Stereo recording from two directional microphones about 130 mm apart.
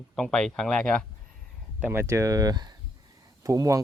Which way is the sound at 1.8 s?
20° right (ahead or behind).